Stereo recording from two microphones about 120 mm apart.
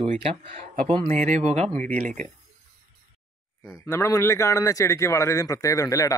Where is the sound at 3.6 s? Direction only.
20° left (ahead or behind).